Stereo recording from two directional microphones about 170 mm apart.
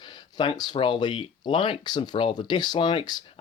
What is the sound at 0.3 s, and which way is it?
Speech, 25° left (ahead or behind).